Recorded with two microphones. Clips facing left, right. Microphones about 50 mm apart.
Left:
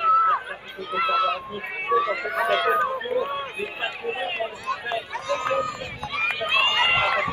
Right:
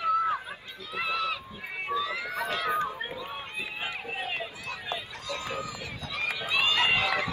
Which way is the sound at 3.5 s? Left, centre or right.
Left.